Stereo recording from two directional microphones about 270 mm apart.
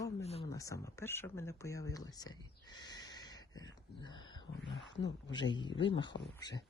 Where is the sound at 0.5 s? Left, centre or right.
Centre.